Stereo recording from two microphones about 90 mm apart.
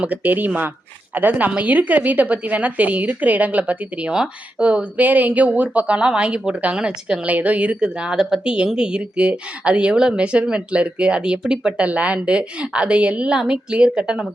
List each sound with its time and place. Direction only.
0.0 s a woman's voice: 20° right (ahead or behind)